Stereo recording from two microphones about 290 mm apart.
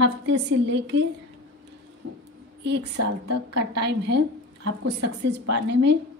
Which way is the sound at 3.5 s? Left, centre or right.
Right.